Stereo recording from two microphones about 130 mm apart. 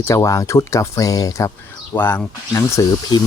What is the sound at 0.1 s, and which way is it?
Speech, 25° left (ahead or behind).